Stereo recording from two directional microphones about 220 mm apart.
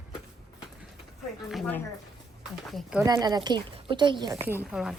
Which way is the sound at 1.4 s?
5° left (ahead or behind).